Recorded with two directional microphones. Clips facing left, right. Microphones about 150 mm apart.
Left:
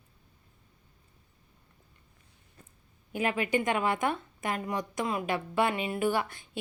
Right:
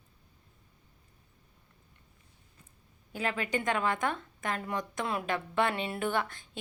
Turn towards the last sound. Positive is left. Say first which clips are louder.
# left 3 dB
turn(degrees=5)  # may be behind; listen again after turning